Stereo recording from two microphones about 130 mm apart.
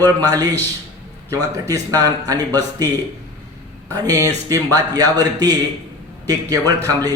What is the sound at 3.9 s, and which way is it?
Speech, 25° right (ahead or behind).